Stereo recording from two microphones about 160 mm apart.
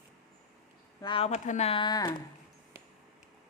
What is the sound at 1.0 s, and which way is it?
Speech, 35° left (ahead or behind).